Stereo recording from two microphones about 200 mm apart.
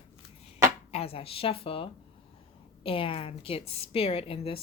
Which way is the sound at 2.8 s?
25° left (ahead or behind).